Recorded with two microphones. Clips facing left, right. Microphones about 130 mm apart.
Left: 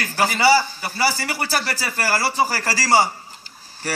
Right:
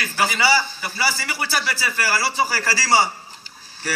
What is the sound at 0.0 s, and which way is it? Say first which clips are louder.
A man's voice: left 3 dB; 45° left (ahead or behind).